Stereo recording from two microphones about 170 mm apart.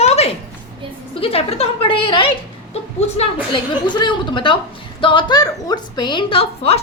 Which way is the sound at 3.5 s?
25° left (ahead or behind).